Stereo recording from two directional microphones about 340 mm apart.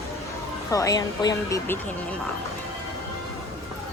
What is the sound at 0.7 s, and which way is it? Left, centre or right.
Speech, centre.